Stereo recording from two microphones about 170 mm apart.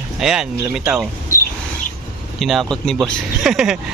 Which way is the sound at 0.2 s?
5° right (ahead or behind).